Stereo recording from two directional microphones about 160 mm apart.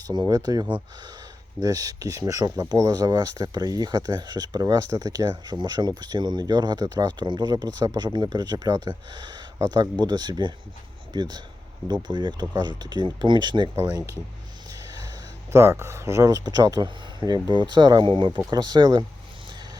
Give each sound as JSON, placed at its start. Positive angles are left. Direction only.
{"t": 0.1, "sound": "speech", "side_deg": -25}
{"t": 14.7, "sound": "a sound", "side_deg": -25}
{"t": 15.5, "sound": "speech", "side_deg": -15}